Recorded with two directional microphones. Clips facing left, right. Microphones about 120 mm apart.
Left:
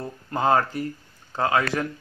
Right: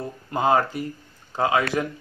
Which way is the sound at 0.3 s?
15° right (ahead or behind).